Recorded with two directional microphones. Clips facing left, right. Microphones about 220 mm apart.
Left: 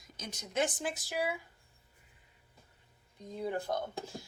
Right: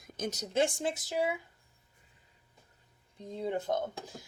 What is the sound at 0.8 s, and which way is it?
Speech, 25° right (ahead or behind).